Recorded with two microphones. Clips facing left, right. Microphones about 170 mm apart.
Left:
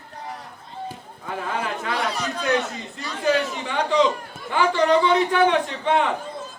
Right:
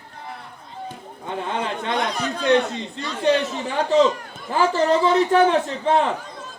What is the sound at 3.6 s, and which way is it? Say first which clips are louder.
A man's voice: right 3 dB; 40° right (ahead or behind).